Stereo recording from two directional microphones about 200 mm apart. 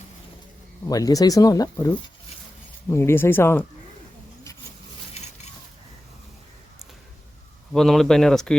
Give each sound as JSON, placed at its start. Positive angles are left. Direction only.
{"t": 0.9, "sound": "speech", "side_deg": 20}
{"t": 7.7, "sound": "speech", "side_deg": 0}